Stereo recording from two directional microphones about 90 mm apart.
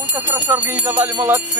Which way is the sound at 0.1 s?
20° right (ahead or behind).